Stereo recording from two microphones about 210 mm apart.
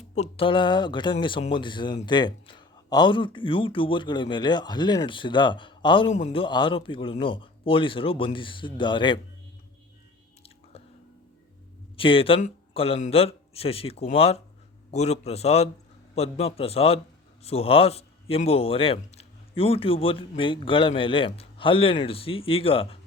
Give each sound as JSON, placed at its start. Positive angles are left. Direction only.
{"t": 0.1, "sound": "a man's voice", "side_deg": 30}
{"t": 10.4, "sound": "chewing", "side_deg": 30}
{"t": 11.9, "sound": "a man's voice", "side_deg": 25}